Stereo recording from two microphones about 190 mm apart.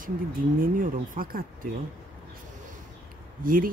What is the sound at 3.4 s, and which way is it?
Speech, 45° right (ahead or behind).